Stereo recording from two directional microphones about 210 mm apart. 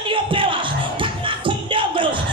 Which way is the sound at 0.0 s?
25° right (ahead or behind).